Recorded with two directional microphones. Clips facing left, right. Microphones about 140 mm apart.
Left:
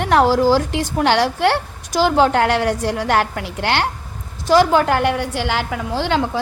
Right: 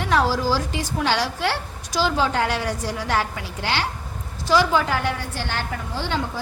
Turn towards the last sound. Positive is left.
turn(degrees=85)